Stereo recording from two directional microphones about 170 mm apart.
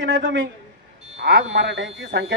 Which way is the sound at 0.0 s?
90° right.